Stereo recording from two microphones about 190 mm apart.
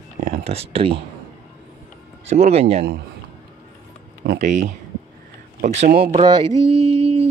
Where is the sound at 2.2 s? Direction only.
35° right (ahead or behind).